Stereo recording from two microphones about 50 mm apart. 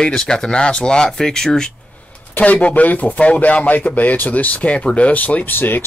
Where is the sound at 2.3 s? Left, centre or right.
Left.